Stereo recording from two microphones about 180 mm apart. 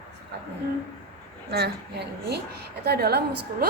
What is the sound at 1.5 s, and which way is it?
A woman's voice, 65° right (ahead or behind).